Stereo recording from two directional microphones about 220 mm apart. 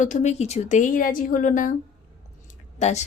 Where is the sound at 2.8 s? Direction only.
30° left (ahead or behind).